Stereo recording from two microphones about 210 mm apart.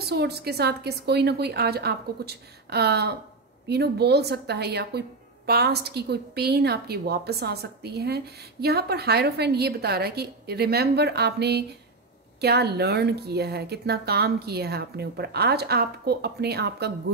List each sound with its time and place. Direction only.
0.0 s a woman's voice: 50° right (ahead or behind)